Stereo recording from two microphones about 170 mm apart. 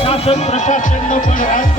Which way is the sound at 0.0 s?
35° left (ahead or behind).